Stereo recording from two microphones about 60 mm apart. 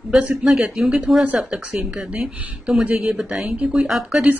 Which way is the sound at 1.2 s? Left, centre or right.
Right.